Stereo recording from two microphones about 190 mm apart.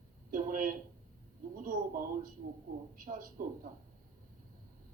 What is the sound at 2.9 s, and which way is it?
Speech, 45° right (ahead or behind).